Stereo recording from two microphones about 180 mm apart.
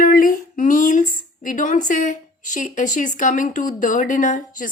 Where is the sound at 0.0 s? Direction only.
50° left (ahead or behind).